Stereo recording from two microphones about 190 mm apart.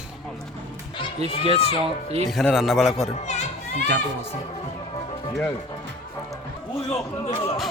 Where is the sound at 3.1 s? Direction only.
35° left (ahead or behind).